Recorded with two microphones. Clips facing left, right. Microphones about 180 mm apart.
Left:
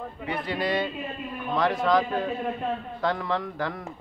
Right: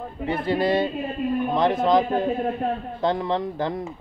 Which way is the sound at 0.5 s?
30° right (ahead or behind).